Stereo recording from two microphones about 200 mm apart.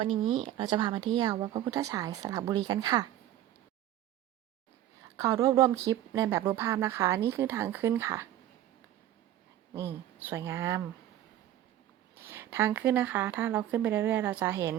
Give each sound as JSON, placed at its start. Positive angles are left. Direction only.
{"t": 0.0, "sound": "speech", "side_deg": -25}
{"t": 5.0, "sound": "speech", "side_deg": -15}
{"t": 9.7, "sound": "speech", "side_deg": -10}
{"t": 12.1, "sound": "speech", "side_deg": -10}